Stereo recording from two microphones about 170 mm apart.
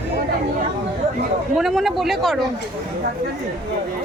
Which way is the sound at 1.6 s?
Centre (ahead or behind).